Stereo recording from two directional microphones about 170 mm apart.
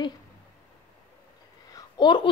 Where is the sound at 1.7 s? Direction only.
25° left (ahead or behind).